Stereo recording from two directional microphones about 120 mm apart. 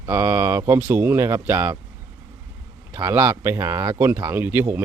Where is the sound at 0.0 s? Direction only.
20° right (ahead or behind).